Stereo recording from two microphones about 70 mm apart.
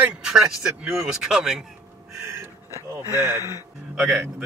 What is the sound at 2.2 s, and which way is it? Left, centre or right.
Music, right.